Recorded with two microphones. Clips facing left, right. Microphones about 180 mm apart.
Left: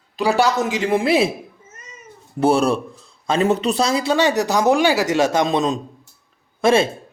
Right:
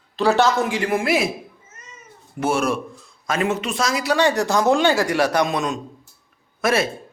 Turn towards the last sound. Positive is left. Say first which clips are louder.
# left 5 dB
turn(degrees=25)  # may be behind; listen again after turning